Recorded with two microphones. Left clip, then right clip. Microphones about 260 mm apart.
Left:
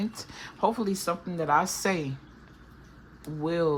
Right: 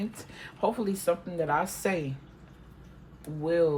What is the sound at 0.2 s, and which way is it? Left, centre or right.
A woman's voice, centre.